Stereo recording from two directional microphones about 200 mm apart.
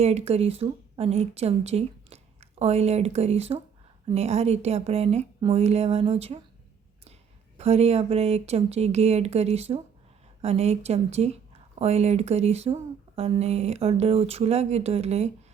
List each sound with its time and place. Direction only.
0.0 s a woman's voice: 30° right (ahead or behind)
7.6 s a woman's voice: 30° right (ahead or behind)